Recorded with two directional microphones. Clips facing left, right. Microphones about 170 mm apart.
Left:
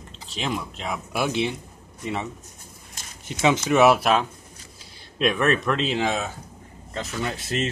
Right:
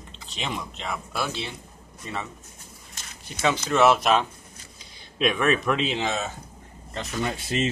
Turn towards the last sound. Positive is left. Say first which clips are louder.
# right 1 dB
turn(degrees=0)  # may be behind; listen again after turning